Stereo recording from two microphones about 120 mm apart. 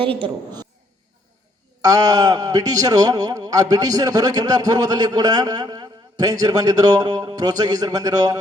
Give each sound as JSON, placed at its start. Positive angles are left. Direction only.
{"t": 0.0, "sound": "a woman's voice", "side_deg": -50}
{"t": 1.8, "sound": "a man's voice", "side_deg": -30}